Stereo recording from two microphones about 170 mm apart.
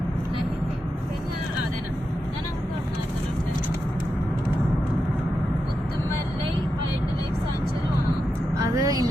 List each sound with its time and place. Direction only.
8.5 s vehicle: 20° right (ahead or behind)